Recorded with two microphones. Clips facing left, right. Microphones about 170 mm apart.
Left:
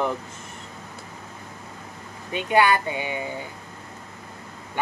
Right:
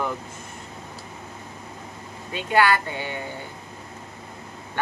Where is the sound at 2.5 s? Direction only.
15° left (ahead or behind).